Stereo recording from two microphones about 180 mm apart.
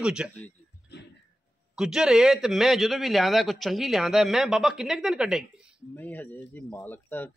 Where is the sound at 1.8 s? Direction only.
5° right (ahead or behind).